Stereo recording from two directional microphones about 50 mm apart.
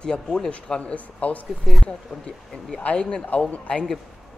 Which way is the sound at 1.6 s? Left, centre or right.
Centre.